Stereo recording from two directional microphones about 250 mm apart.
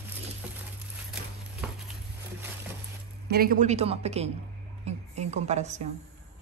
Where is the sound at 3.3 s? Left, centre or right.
Right.